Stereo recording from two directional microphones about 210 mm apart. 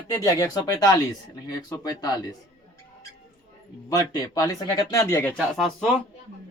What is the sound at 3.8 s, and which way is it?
Speech, 15° left (ahead or behind).